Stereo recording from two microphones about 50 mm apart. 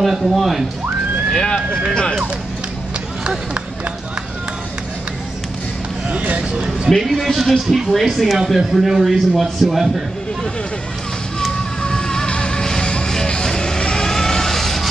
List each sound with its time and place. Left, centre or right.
0.0 s speech: centre
1.3 s speech: centre
6.0 s speech: right
7.0 s speech: centre
11.8 s music: centre